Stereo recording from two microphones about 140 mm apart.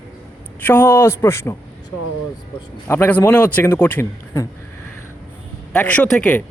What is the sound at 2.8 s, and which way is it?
A man's voice, 15° left (ahead or behind).